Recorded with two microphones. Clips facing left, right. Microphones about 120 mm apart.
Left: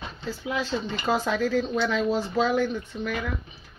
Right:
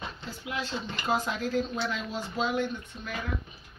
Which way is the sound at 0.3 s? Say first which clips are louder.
Left 7 dB; 90° left.